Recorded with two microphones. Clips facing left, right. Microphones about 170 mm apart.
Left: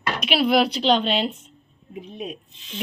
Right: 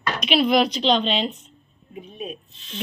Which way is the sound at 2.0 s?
80° left.